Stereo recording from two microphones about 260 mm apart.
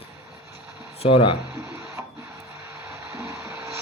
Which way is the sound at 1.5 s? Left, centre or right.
Centre.